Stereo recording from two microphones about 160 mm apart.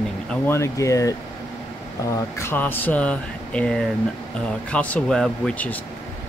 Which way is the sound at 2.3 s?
15° left (ahead or behind).